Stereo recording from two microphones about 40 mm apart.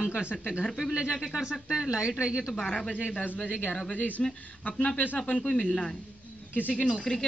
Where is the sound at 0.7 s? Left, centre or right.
Centre.